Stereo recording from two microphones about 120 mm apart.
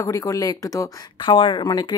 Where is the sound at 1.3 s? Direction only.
45° left (ahead or behind).